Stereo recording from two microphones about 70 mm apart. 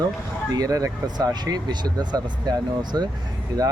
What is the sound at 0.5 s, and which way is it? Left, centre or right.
Speech, right.